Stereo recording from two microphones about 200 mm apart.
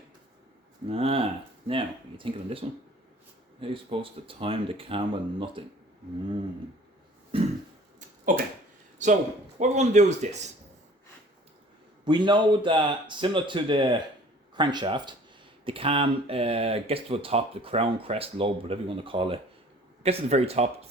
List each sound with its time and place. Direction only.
0.9 s speech: 30° right (ahead or behind)
9.0 s speech: 35° right (ahead or behind)
12.0 s speech: 25° right (ahead or behind)